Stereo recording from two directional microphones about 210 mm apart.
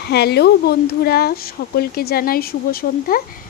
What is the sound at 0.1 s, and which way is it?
Speech, 50° left (ahead or behind).